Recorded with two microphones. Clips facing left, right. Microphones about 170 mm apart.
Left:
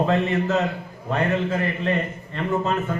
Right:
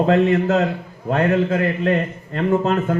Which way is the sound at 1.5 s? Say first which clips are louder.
Right 5 dB; 60° right (ahead or behind).